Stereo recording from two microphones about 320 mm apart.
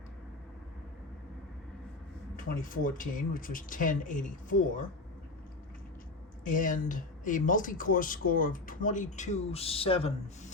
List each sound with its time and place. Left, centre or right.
2.3 s speech: left
6.4 s speech: left